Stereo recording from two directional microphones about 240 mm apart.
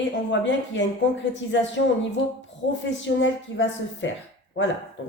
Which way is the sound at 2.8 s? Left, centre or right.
Left.